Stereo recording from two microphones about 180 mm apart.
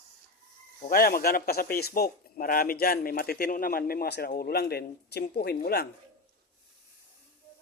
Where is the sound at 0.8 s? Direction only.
55° left (ahead or behind).